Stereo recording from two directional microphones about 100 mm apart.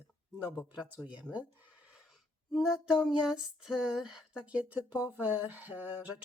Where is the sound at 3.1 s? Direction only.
5° right (ahead or behind).